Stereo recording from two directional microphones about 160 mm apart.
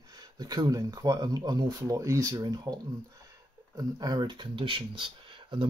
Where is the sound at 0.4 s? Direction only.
25° right (ahead or behind).